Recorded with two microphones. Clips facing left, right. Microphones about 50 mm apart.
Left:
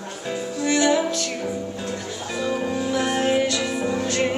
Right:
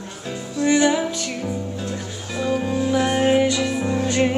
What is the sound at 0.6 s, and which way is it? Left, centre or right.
Music, centre.